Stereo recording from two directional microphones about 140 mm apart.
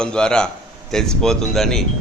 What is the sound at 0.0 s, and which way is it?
Speech, 5° left (ahead or behind).